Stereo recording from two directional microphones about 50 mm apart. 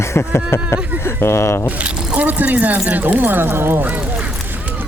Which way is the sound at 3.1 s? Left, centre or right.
Right.